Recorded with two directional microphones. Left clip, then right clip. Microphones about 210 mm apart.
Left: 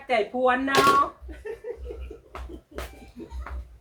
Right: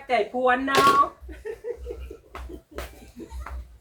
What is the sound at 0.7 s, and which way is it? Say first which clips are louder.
Speech: right 1 dB; 10° left (ahead or behind).